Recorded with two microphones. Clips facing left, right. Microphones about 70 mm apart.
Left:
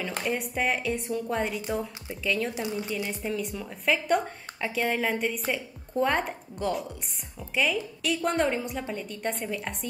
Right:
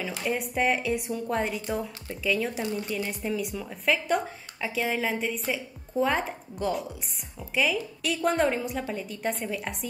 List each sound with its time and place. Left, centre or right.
0.2 s speech: centre
2.5 s a woman's voice: centre